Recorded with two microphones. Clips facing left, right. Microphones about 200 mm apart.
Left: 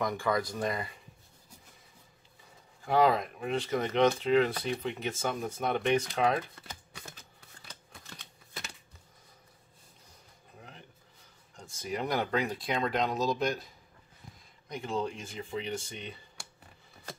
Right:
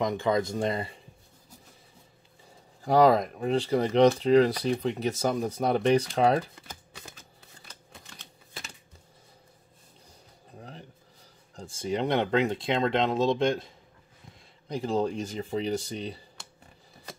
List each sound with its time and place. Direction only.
0.0 s speech: 20° right (ahead or behind)
2.8 s speech: 40° right (ahead or behind)
11.5 s speech: 30° right (ahead or behind)